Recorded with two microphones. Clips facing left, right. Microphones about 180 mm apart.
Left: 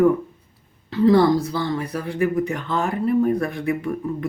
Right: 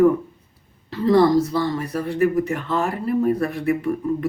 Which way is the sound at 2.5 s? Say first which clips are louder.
Right 1 dB; 35° right (ahead or behind).